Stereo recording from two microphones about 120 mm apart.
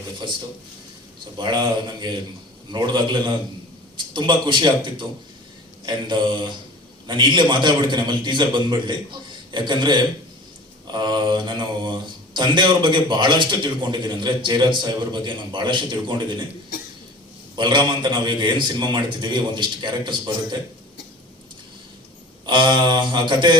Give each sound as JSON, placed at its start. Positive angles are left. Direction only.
{"t": 1.4, "sound": "speech", "side_deg": -40}
{"t": 17.6, "sound": "speech", "side_deg": -40}
{"t": 22.4, "sound": "speech", "side_deg": -40}